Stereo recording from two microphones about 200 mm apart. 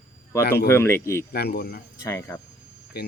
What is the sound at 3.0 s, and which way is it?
Speech, 50° left (ahead or behind).